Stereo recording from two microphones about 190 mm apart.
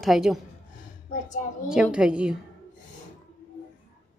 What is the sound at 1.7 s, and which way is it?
Speech, 5° right (ahead or behind).